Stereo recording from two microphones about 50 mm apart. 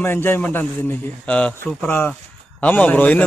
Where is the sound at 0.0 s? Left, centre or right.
Left.